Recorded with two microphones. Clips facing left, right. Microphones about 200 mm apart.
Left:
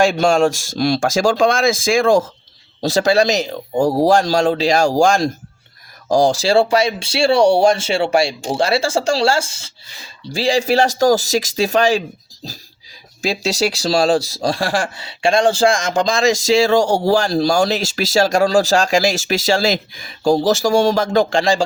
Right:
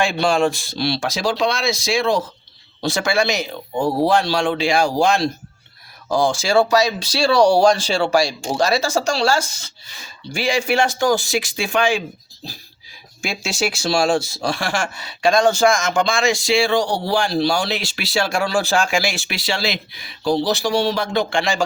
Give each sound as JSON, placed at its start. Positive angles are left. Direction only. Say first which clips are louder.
{"t": 0.0, "sound": "speech", "louder": "left 4 dB", "side_deg": 45}
{"t": 13.2, "sound": "speech", "louder": "left 5 dB", "side_deg": 35}